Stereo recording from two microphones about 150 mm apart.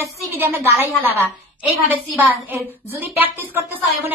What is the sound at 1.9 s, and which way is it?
Speech, 15° right (ahead or behind).